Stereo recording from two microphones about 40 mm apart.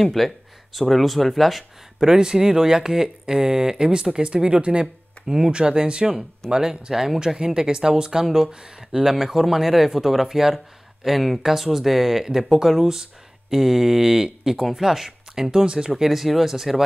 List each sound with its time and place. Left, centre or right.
0.0 s speech: centre
2.0 s speech: centre
5.2 s speech: centre
9.1 s speech: centre
12.8 s a sound: centre
13.6 s speech: centre
16.0 s speech: centre